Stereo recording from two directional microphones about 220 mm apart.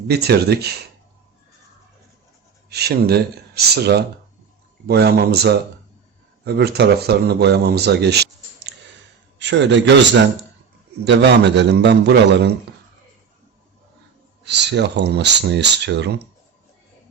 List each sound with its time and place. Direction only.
0.1 s speech: 45° right (ahead or behind)
2.6 s a man's voice: 45° right (ahead or behind)
14.4 s speech: 50° right (ahead or behind)